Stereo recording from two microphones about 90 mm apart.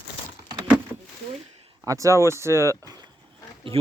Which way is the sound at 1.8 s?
35° right (ahead or behind).